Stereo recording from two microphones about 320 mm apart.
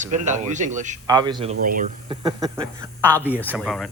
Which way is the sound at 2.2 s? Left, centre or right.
Centre.